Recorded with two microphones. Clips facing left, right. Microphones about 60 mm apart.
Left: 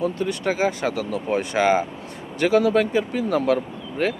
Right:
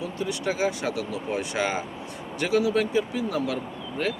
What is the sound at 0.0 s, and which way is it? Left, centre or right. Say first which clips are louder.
Speech: left 5 dB; left.